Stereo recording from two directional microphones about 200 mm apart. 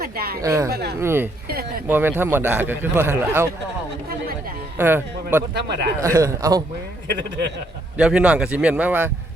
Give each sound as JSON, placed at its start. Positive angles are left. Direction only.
{"t": 0.0, "sound": "speech", "side_deg": -50}
{"t": 0.4, "sound": "a man's voice", "side_deg": -15}
{"t": 0.7, "sound": "speech", "side_deg": -55}
{"t": 0.9, "sound": "a man's voice", "side_deg": -10}
{"t": 1.5, "sound": "a sound", "side_deg": -50}
{"t": 1.9, "sound": "a man's voice", "side_deg": -10}
{"t": 4.8, "sound": "a man's voice", "side_deg": -10}
{"t": 5.5, "sound": "speech", "side_deg": -55}
{"t": 6.0, "sound": "a man's voice", "side_deg": -15}
{"t": 7.1, "sound": "speech", "side_deg": -60}
{"t": 7.9, "sound": "a man's voice", "side_deg": -5}